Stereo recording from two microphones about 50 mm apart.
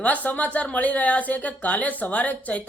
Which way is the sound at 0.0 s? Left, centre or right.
Left.